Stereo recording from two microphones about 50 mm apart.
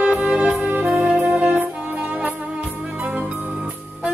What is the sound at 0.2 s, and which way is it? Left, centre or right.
Music, right.